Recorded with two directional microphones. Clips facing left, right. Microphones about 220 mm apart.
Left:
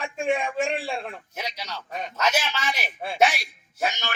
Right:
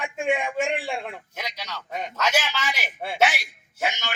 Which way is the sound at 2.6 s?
15° right (ahead or behind).